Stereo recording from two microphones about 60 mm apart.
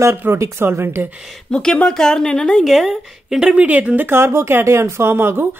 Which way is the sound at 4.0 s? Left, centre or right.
Right.